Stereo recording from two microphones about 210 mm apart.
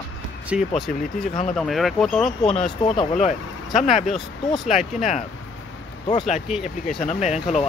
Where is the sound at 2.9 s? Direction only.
30° left (ahead or behind).